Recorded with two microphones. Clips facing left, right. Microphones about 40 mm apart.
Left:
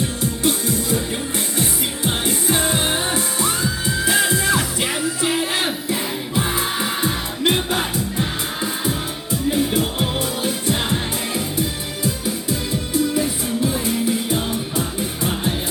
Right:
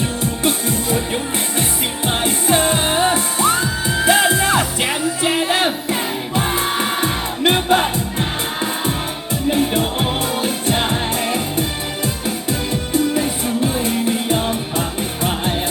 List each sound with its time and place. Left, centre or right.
0.0 s music: right